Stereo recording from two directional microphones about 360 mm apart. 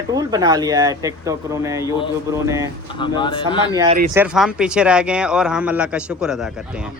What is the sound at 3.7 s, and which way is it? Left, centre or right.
Speech, centre.